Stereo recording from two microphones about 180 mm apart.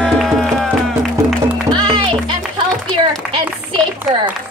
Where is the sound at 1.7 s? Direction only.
25° right (ahead or behind).